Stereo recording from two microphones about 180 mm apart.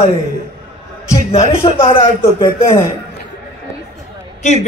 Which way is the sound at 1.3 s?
35° left (ahead or behind).